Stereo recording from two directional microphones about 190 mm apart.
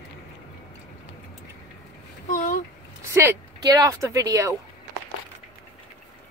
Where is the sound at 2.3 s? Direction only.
40° left (ahead or behind).